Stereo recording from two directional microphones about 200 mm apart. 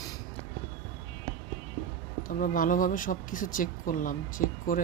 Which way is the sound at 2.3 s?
45° left (ahead or behind).